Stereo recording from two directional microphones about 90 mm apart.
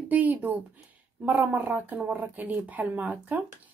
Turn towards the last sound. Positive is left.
turn(degrees=-15)  # may be behind; listen again after turning